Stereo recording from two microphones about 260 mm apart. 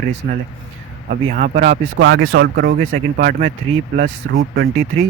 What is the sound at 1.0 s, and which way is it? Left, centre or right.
Speech, right.